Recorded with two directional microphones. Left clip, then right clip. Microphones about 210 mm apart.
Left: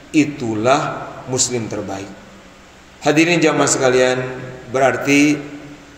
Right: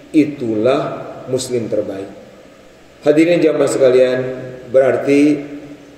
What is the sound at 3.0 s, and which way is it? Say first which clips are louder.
A man's voice: right 2 dB; 25° left (ahead or behind).